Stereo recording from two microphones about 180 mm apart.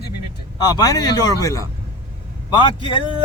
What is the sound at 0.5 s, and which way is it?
Speech, 20° left (ahead or behind).